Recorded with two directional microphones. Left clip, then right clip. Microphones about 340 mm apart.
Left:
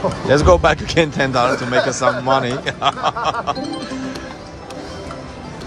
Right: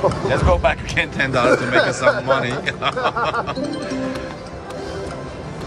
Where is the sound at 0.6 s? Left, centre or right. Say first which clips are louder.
Left 4 dB; centre.